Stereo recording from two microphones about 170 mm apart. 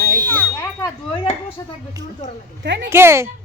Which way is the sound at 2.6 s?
90° right.